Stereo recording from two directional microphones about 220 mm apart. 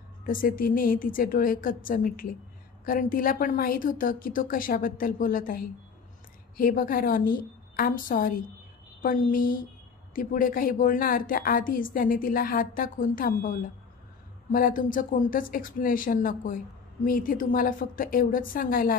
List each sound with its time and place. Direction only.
0.2 s speech: 40° left (ahead or behind)